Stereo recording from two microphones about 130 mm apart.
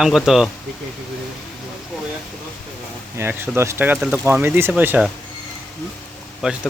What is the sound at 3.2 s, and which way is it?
Speech, 15° right (ahead or behind).